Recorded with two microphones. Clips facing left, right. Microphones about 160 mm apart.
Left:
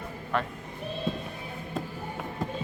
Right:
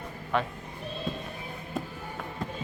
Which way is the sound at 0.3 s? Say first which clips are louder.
Right 1 dB; centre (ahead or behind).